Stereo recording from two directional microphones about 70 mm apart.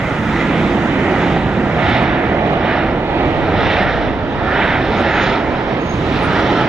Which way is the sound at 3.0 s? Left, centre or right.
Right.